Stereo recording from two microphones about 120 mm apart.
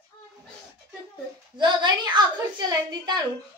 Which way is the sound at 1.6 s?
40° right (ahead or behind).